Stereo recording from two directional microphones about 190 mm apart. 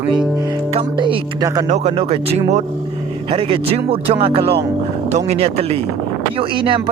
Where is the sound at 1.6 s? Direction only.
35° right (ahead or behind).